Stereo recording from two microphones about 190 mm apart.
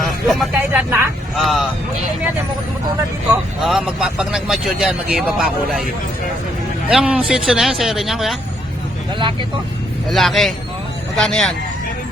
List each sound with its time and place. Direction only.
0.0 s speech: centre (ahead or behind)
1.4 s speech: centre (ahead or behind)
3.6 s speech: 5° right (ahead or behind)
6.8 s speech: 5° right (ahead or behind)
9.1 s speech: 25° right (ahead or behind)
10.1 s speech: centre (ahead or behind)